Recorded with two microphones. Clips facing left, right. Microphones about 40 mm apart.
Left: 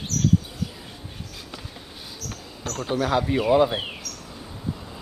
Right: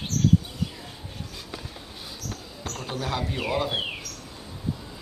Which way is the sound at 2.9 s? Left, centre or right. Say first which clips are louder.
Left 8 dB; left.